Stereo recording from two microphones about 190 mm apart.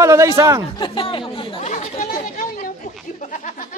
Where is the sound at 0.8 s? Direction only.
25° left (ahead or behind).